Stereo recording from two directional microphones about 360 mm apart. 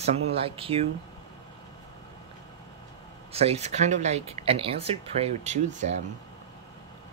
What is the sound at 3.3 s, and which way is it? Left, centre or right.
Speech, centre.